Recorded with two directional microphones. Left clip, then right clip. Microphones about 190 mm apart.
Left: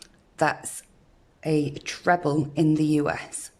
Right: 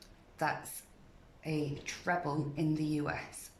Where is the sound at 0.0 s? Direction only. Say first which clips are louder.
Left 11 dB; 40° left (ahead or behind).